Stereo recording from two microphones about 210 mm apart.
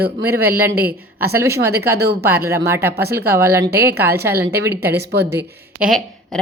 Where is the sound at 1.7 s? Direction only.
50° right (ahead or behind).